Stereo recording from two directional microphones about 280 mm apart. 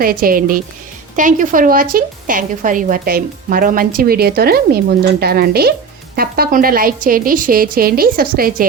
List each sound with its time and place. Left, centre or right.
0.0 s a woman's voice: right